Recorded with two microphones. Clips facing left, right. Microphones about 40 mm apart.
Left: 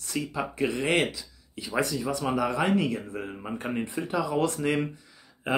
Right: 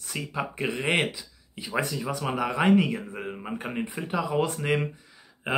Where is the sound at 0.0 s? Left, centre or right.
Centre.